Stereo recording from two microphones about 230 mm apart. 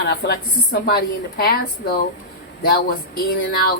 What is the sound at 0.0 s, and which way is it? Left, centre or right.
A woman's voice, left.